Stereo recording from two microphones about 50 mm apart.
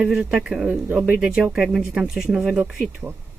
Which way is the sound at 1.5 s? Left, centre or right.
Centre.